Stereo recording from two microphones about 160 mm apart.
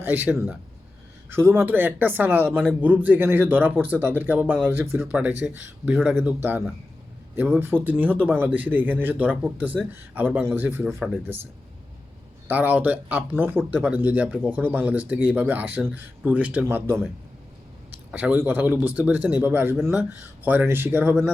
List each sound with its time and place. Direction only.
0.0 s speech: 10° right (ahead or behind)
12.5 s speech: 10° right (ahead or behind)
18.1 s speech: 10° right (ahead or behind)